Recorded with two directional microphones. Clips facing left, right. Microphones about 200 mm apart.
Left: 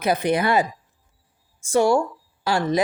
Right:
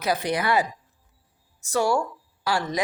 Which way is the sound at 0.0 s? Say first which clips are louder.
Left 4 dB; 25° left (ahead or behind).